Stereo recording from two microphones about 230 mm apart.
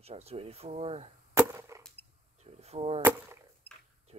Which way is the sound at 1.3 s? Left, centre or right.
Centre.